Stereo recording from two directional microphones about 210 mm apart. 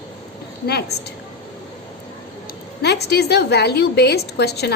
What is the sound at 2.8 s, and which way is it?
A woman's voice, 50° left (ahead or behind).